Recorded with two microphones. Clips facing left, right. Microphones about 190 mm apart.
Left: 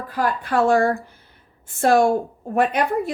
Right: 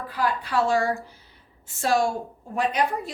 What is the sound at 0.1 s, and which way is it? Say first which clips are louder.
A woman's voice: left 4 dB; 50° left (ahead or behind).